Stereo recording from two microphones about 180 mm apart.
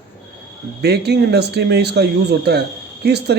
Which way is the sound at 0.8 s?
65° right (ahead or behind).